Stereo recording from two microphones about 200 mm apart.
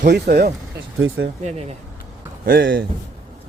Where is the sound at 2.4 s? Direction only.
50° right (ahead or behind).